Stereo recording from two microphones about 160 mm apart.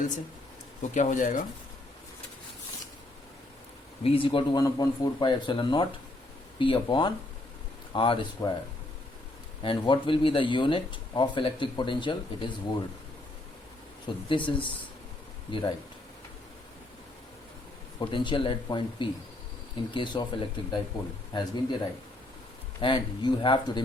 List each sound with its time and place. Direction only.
0.8 s speech: 50° left (ahead or behind)
4.0 s speech: 35° left (ahead or behind)
8.4 s speech: 20° left (ahead or behind)
9.6 s speech: 30° left (ahead or behind)
14.3 s speech: 30° left (ahead or behind)
18.0 s speech: 30° left (ahead or behind)
22.8 s speech: 30° left (ahead or behind)